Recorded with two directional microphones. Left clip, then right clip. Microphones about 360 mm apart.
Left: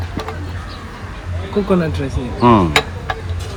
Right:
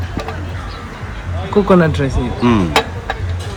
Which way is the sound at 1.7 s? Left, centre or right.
Right.